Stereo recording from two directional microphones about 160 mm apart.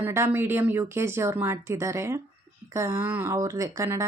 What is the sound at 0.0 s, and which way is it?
Speech, 15° right (ahead or behind).